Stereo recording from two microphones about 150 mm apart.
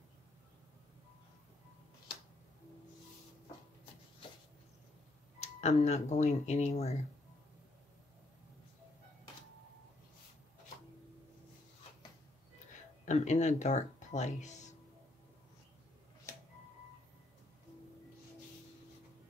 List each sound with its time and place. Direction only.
5.4 s speech: 45° left (ahead or behind)
13.0 s speech: 50° left (ahead or behind)